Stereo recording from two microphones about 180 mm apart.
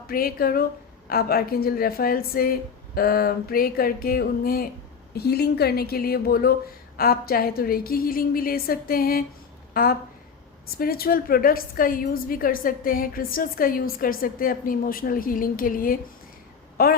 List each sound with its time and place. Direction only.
0.1 s a woman's voice: 55° left (ahead or behind)